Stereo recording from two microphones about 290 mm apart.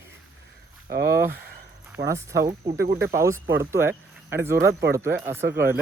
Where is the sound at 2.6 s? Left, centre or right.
Right.